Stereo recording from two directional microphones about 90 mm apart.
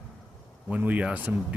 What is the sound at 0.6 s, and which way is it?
Speech, 15° right (ahead or behind).